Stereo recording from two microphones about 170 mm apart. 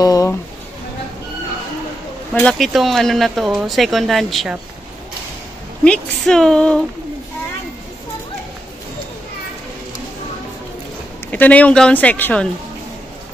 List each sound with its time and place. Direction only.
0.0 s a sound: 20° left (ahead or behind)
2.3 s speech: 5° left (ahead or behind)
5.9 s speech: 5° left (ahead or behind)
11.2 s speech: 10° left (ahead or behind)